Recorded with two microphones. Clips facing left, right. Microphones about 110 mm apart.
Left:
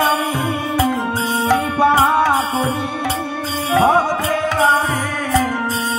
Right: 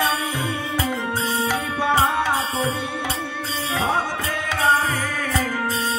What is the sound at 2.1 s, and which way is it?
Music, 50° left (ahead or behind).